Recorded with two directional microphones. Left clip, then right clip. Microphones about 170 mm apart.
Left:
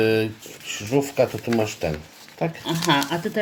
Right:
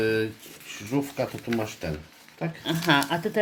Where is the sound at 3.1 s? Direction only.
20° right (ahead or behind).